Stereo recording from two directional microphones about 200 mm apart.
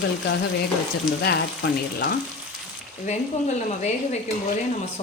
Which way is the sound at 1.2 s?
55° left (ahead or behind).